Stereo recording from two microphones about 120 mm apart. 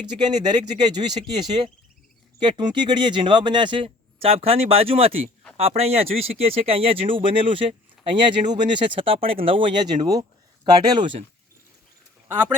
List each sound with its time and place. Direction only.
0.2 s speech: 35° right (ahead or behind)